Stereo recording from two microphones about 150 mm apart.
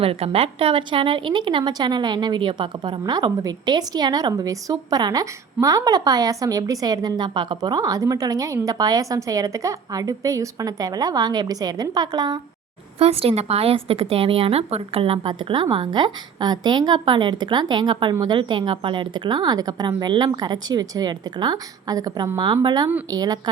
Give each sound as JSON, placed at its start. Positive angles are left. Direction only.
{"t": 0.0, "sound": "a woman's voice", "side_deg": -40}
{"t": 13.0, "sound": "a woman's voice", "side_deg": -40}
{"t": 18.3, "sound": "a woman's voice", "side_deg": -35}